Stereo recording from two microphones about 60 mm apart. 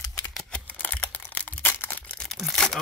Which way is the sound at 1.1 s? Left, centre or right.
Left.